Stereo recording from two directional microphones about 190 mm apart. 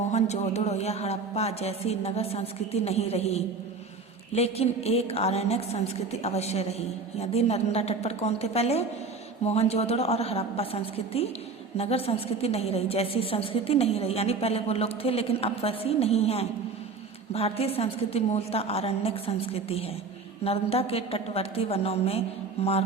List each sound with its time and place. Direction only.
0.1 s a woman's voice: 35° left (ahead or behind)